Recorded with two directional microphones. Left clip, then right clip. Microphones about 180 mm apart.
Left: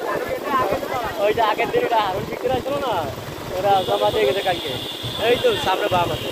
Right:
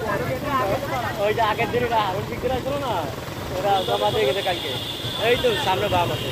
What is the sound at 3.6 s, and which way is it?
Speech, 35° left (ahead or behind).